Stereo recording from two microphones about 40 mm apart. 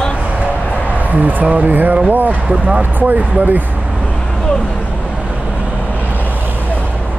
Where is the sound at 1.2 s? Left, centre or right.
Right.